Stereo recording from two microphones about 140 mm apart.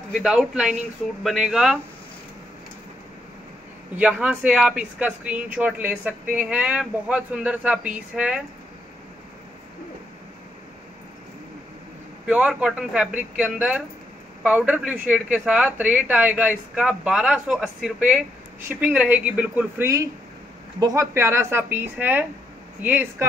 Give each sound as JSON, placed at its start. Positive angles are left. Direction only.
{"t": 0.2, "sound": "speech", "side_deg": -5}
{"t": 3.9, "sound": "speech", "side_deg": -10}
{"t": 12.3, "sound": "speech", "side_deg": -10}
{"t": 20.8, "sound": "speech", "side_deg": -25}